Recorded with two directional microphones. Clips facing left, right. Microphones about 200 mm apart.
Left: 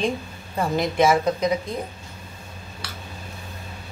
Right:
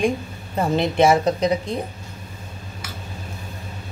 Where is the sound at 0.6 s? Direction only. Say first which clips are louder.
Right 3 dB; 25° right (ahead or behind).